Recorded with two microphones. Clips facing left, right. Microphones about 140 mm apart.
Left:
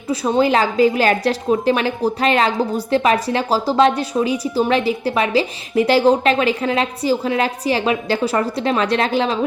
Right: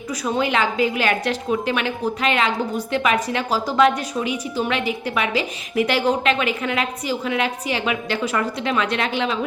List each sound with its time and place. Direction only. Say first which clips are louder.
0.1 s a woman's voice: left 6 dB; 30° left (ahead or behind)